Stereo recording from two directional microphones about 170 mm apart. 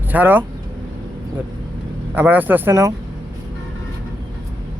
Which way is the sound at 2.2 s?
10° right (ahead or behind).